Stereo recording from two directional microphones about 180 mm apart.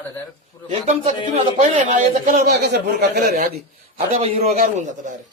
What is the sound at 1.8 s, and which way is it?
A man's voice, 50° right (ahead or behind).